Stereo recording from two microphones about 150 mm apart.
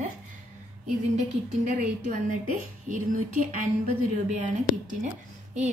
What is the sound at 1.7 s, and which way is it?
Speech, 55° right (ahead or behind).